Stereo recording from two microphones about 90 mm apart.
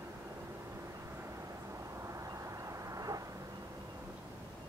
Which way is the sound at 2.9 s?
40° right (ahead or behind).